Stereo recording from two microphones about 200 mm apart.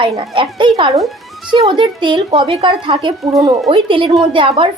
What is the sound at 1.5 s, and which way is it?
A woman's voice, 25° right (ahead or behind).